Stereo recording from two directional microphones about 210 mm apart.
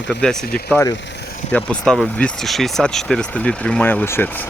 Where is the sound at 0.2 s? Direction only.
5° left (ahead or behind).